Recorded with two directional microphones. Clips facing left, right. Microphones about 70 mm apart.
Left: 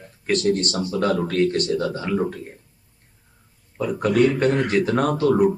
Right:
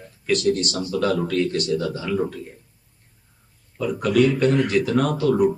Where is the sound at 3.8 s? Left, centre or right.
Left.